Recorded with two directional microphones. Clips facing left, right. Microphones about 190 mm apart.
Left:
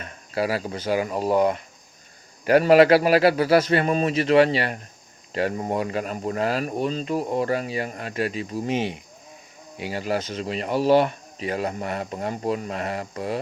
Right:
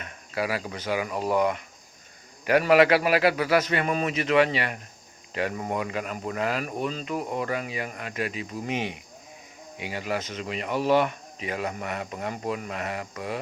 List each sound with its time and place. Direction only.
0.0 s speech: 35° left (ahead or behind)